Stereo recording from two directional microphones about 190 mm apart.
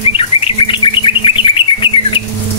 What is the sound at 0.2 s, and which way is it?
Bird, 30° left (ahead or behind).